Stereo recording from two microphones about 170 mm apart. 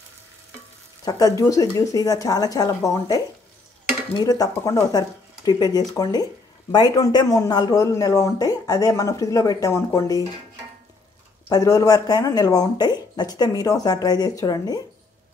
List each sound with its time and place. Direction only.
1.0 s a man's voice: 20° left (ahead or behind)
11.4 s a man's voice: 20° left (ahead or behind)